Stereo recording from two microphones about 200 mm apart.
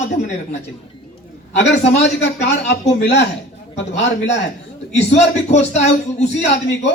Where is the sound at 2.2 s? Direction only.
60° left (ahead or behind).